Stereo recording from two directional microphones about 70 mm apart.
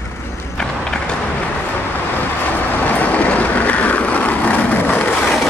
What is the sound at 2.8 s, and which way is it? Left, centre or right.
Vehicle, left.